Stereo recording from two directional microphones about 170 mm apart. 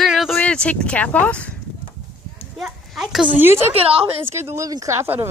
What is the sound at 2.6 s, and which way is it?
A child's voice, centre (ahead or behind).